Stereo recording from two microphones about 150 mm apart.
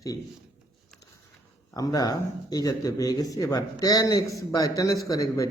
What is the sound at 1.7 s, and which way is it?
Speech, 25° left (ahead or behind).